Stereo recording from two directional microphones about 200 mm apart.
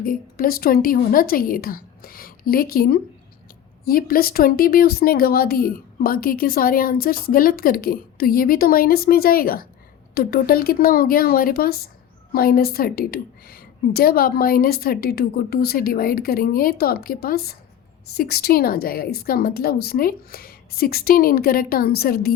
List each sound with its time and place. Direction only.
0.0 s speech: 45° left (ahead or behind)